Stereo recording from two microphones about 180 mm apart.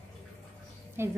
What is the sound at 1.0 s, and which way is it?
Speech, 15° right (ahead or behind).